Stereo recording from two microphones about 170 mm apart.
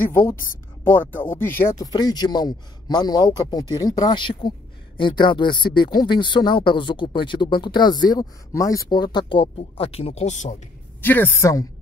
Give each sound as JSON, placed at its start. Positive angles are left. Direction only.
{"t": 0.8, "sound": "speech", "side_deg": 10}
{"t": 11.0, "sound": "a woman's voice", "side_deg": 10}